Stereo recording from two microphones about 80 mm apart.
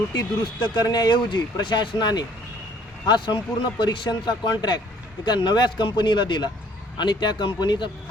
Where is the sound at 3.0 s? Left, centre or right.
Left.